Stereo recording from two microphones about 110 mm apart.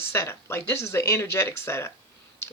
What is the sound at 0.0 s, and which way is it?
Speech, 25° left (ahead or behind).